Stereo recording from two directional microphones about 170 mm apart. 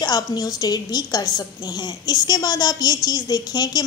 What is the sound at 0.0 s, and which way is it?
A woman's voice, 25° left (ahead or behind).